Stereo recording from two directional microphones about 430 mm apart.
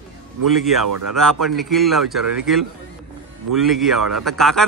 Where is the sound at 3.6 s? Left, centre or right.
Centre.